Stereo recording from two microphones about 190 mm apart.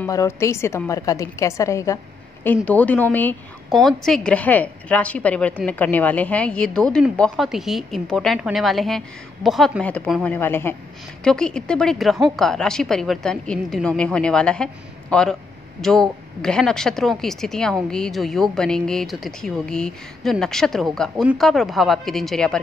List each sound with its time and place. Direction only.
0.0 s a woman's voice: 15° left (ahead or behind)